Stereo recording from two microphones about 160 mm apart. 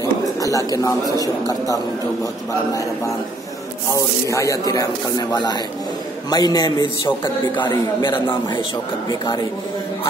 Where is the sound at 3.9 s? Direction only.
20° left (ahead or behind).